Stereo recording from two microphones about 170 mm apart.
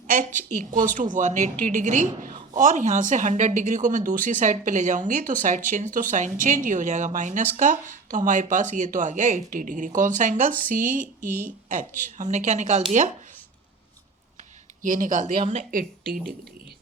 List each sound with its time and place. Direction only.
0.3 s speech: 50° right (ahead or behind)
14.8 s speech: 50° right (ahead or behind)